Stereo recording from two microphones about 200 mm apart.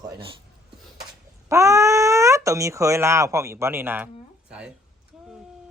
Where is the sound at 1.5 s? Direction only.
15° right (ahead or behind).